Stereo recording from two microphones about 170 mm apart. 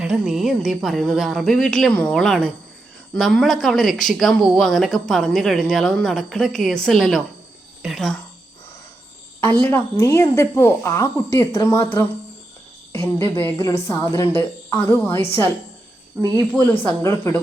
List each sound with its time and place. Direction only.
0.0 s speech: centre (ahead or behind)
9.4 s speech: 10° left (ahead or behind)
16.2 s speech: 25° right (ahead or behind)
16.8 s speech: 15° left (ahead or behind)